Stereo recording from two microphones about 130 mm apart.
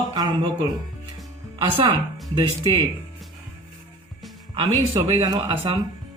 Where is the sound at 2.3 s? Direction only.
35° right (ahead or behind).